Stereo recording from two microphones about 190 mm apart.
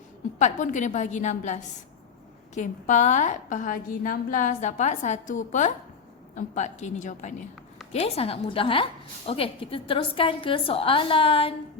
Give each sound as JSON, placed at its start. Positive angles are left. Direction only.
{"t": 0.3, "sound": "a woman's voice", "side_deg": 40}